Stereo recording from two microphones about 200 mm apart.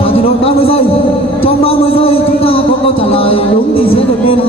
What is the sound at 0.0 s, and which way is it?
Speech, 30° left (ahead or behind).